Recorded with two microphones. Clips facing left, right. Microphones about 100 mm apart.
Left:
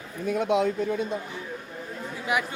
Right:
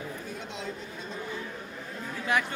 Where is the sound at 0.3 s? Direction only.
65° left (ahead or behind).